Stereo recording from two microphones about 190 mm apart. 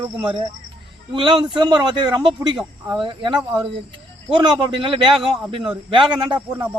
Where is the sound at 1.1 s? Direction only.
25° right (ahead or behind).